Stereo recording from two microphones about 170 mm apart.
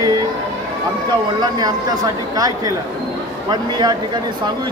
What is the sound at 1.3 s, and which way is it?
Speech, 20° right (ahead or behind).